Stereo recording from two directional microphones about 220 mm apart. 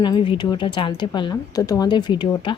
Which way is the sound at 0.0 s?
20° left (ahead or behind).